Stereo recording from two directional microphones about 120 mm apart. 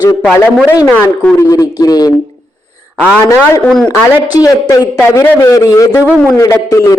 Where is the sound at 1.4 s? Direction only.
30° left (ahead or behind).